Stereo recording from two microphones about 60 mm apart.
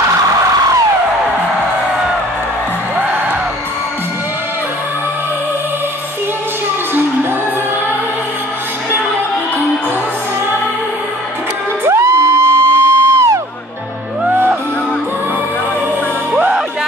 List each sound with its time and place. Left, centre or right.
3.0 s music: right
11.8 s music: right